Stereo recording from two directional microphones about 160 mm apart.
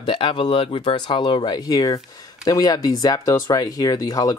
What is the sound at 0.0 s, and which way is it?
Speech, 30° left (ahead or behind).